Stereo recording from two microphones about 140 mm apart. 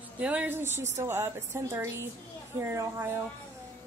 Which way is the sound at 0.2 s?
10° right (ahead or behind).